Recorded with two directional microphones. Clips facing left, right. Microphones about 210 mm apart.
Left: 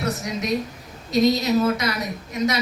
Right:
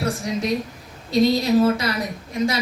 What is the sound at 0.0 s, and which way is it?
A woman's voice, 30° right (ahead or behind).